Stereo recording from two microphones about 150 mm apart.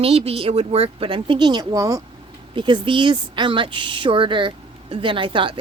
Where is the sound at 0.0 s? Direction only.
40° right (ahead or behind); by 2.0 s 20° right (ahead or behind).